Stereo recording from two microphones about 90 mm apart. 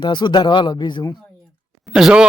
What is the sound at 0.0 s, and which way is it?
Speech, 55° left (ahead or behind).